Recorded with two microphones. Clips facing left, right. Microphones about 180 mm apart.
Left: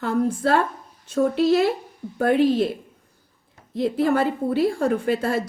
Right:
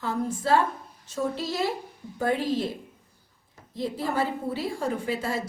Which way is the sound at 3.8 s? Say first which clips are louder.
Left 7 dB; 65° left (ahead or behind).